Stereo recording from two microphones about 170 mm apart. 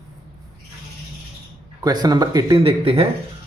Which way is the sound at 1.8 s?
25° right (ahead or behind).